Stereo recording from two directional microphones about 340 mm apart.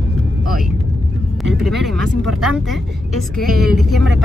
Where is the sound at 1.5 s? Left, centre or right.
Centre.